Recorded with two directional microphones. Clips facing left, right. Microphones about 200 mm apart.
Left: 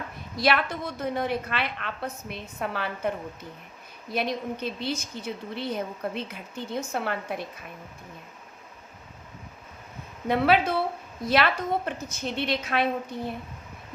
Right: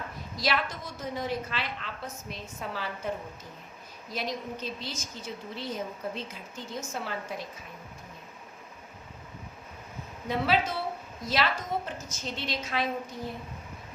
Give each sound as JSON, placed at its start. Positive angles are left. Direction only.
{"t": 0.3, "sound": "a woman's voice", "side_deg": 60}
{"t": 4.1, "sound": "a woman's voice", "side_deg": 60}
{"t": 10.2, "sound": "a woman's voice", "side_deg": 60}